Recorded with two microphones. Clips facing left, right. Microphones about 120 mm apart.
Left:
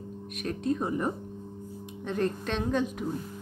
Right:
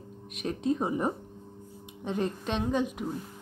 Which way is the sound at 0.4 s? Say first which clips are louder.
Right 1 dB; 20° right (ahead or behind).